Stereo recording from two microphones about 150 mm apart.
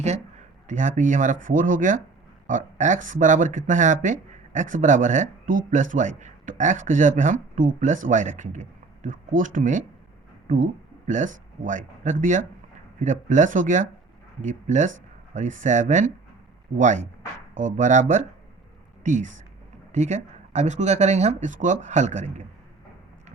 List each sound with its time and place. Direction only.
0.7 s speech: 55° right (ahead or behind)